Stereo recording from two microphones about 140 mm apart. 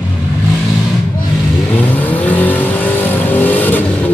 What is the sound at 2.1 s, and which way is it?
Vehicle, 10° left (ahead or behind).